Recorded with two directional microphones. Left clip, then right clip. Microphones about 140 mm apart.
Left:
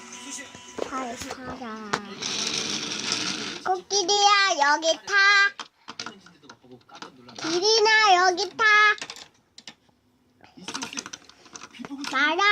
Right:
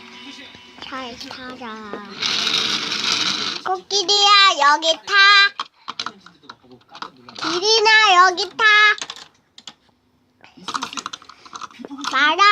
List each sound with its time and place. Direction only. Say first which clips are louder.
1.4 s a child's voice: right 4 dB; 40° left (ahead or behind)
2.4 s mechanisms: right 8 dB; 15° left (ahead or behind)
3.8 s a child's voice: right 5 dB; 45° left (ahead or behind)
7.3 s a sound: right 4 dB; 15° left (ahead or behind)
7.6 s a child's voice: right 5 dB; 45° left (ahead or behind)
8.5 s a sound: right 5 dB; 45° left (ahead or behind)
9.0 s typing: right 6 dB; 5° left (ahead or behind)
10.9 s typing: right 7 dB; 20° left (ahead or behind)
12.1 s a child's voice: right 7 dB; 45° left (ahead or behind)